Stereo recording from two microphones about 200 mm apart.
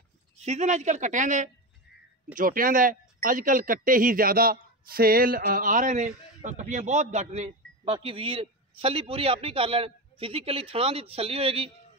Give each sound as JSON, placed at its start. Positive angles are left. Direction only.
{"t": 0.4, "sound": "speech", "side_deg": -35}